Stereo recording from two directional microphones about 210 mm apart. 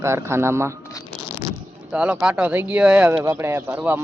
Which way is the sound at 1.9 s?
5° right (ahead or behind).